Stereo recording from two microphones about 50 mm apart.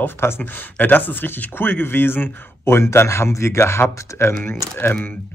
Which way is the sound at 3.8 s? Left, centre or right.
Left.